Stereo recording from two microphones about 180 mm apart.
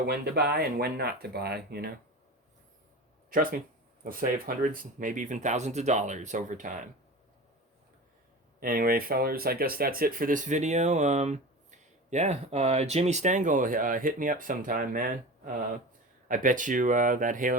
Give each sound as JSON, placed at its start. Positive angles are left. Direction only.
{"t": 0.0, "sound": "speech", "side_deg": -60}
{"t": 3.2, "sound": "speech", "side_deg": -50}
{"t": 8.6, "sound": "speech", "side_deg": -55}